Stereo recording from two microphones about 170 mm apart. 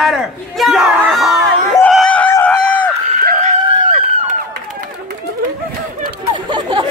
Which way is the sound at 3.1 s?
55° right (ahead or behind).